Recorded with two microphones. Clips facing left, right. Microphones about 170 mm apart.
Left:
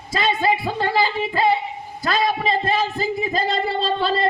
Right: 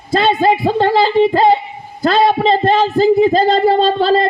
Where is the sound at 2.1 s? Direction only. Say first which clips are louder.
Right 9 dB; 30° right (ahead or behind).